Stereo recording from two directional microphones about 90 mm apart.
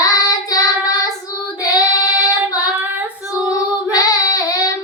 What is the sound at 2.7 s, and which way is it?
Child singing, 20° right (ahead or behind).